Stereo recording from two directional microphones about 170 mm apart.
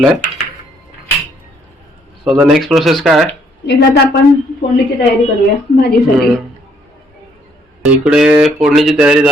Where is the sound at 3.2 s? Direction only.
85° left.